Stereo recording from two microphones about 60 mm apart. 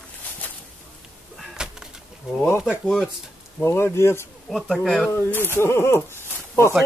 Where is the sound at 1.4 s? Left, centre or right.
Centre.